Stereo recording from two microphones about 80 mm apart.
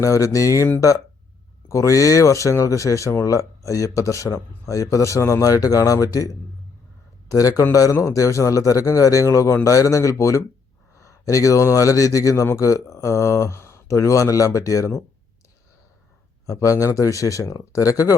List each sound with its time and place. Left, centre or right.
0.0 s a man's voice: left
16.5 s speech: left